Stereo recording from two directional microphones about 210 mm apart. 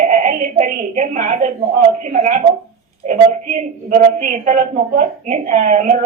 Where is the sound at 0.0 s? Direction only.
40° right (ahead or behind).